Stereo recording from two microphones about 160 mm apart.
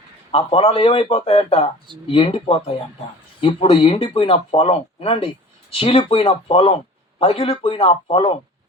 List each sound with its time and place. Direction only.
0.3 s speech: 35° left (ahead or behind)